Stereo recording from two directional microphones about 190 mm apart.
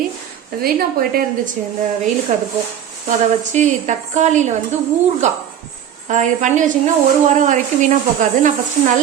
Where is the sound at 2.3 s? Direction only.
40° right (ahead or behind).